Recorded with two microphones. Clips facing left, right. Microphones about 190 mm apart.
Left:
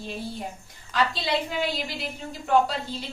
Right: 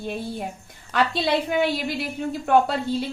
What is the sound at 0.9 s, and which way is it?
A woman's voice, 60° right (ahead or behind).